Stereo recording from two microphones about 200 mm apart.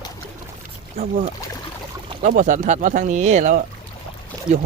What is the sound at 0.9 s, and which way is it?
Speech, 35° right (ahead or behind).